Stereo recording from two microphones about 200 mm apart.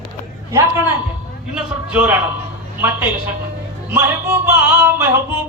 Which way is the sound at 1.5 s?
10° right (ahead or behind).